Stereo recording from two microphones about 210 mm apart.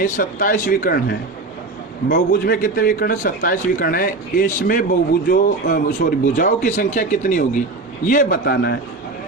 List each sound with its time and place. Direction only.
0.0 s a man's voice: 40° left (ahead or behind)